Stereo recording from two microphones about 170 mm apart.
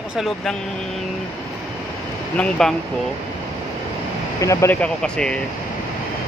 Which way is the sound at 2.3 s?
5° left (ahead or behind).